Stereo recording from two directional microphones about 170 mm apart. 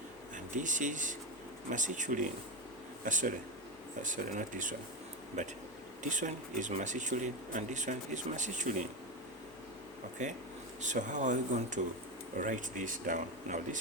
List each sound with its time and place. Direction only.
0.3 s speech: 50° right (ahead or behind)
10.2 s speech: 45° right (ahead or behind)